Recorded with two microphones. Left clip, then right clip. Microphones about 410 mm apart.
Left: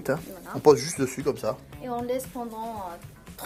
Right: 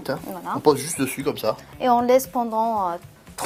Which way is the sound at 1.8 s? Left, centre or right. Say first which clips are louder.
Right 15 dB; right.